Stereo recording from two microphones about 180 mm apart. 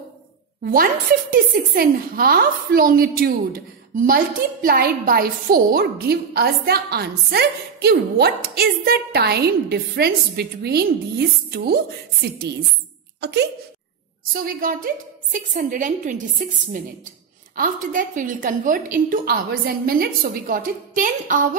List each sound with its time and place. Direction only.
1.3 s a woman's voice: 50° right (ahead or behind)
14.3 s a woman's voice: 55° right (ahead or behind)
17.6 s a woman's voice: 45° right (ahead or behind)